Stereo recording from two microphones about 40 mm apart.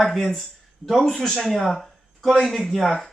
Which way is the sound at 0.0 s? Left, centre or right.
Centre.